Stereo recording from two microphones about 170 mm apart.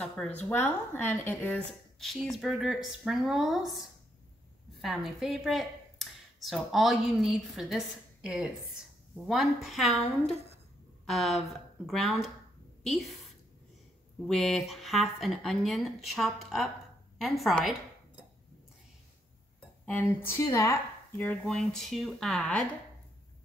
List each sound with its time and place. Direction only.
0.4 s a woman's voice: 10° left (ahead or behind)
4.8 s a woman's voice: centre (ahead or behind)
11.1 s a woman's voice: centre (ahead or behind)
14.2 s a woman's voice: centre (ahead or behind)
19.9 s a woman's voice: 10° left (ahead or behind)
21.2 s a woman's voice: 5° left (ahead or behind)